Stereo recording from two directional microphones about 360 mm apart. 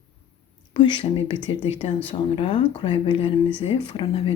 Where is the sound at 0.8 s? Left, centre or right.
Centre.